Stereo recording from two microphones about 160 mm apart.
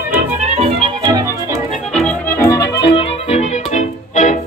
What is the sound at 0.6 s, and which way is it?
Music, 40° right (ahead or behind).